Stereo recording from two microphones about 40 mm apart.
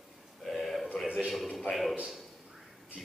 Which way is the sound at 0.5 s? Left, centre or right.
Centre.